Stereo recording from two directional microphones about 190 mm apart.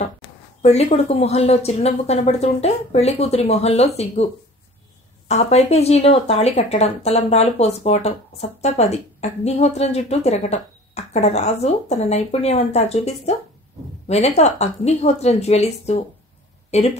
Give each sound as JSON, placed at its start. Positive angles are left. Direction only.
{"t": 0.6, "sound": "speech", "side_deg": 35}
{"t": 5.3, "sound": "speech", "side_deg": 35}